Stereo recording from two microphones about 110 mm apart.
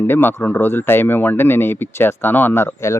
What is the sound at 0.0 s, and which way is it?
Speech, 20° left (ahead or behind).